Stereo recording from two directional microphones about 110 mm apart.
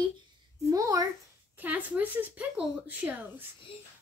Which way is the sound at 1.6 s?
15° right (ahead or behind).